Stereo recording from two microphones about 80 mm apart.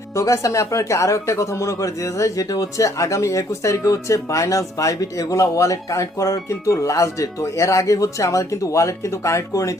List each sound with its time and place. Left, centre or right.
0.1 s speech: left